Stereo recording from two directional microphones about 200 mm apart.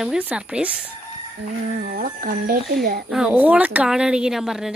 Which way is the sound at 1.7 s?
45° right (ahead or behind).